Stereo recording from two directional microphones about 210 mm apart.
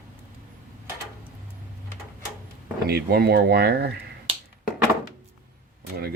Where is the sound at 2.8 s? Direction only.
50° right (ahead or behind).